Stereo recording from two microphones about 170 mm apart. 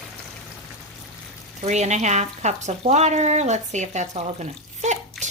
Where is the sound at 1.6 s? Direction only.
40° right (ahead or behind).